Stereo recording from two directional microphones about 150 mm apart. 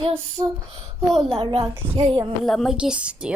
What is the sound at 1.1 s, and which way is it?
Speech, centre (ahead or behind).